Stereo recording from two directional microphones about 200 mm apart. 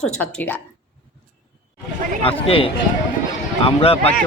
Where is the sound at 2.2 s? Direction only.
30° left (ahead or behind).